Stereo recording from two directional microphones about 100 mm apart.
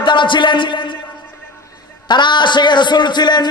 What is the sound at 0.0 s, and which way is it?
Speech, 55° left (ahead or behind).